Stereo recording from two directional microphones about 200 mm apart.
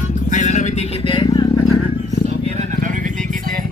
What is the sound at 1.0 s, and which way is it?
Vehicle, 25° left (ahead or behind).